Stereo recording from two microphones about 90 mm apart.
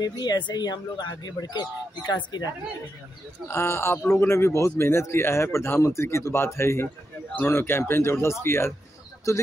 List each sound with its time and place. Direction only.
0.0 s speech: 50° left (ahead or behind)
3.4 s speech: 30° left (ahead or behind)